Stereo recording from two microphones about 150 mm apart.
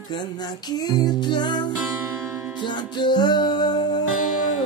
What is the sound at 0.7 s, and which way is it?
Music, 25° left (ahead or behind).